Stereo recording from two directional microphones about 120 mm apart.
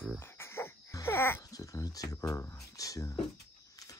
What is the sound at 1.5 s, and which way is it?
Speech, 30° left (ahead or behind).